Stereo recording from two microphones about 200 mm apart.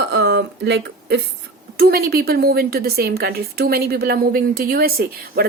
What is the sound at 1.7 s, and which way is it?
A woman's voice, 50° right (ahead or behind).